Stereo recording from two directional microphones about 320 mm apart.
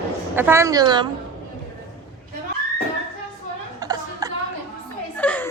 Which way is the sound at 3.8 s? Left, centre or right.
Centre.